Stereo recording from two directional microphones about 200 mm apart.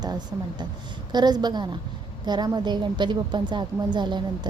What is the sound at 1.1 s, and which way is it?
A woman's voice, 20° right (ahead or behind).